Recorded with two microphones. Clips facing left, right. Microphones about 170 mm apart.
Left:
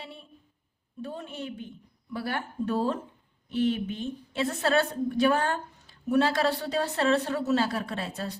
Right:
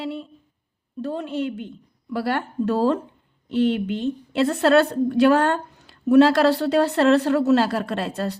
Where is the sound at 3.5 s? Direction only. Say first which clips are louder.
Right 6 dB; 70° right (ahead or behind).